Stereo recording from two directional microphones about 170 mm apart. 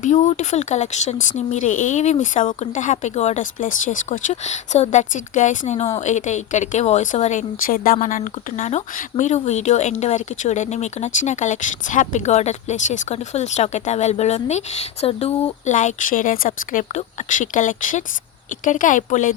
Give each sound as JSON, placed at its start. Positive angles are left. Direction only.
{"t": 0.0, "sound": "speech", "side_deg": 45}